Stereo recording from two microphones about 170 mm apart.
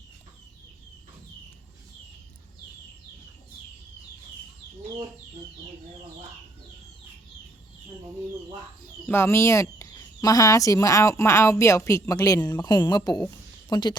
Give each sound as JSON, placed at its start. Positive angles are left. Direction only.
{"t": 9.0, "sound": "speech", "side_deg": 15}